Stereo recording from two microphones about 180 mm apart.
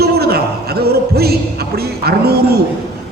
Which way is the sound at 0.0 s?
60° right (ahead or behind).